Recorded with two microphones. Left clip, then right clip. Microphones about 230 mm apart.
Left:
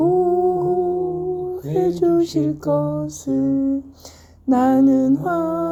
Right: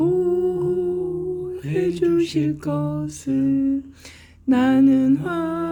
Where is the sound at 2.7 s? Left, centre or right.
Right.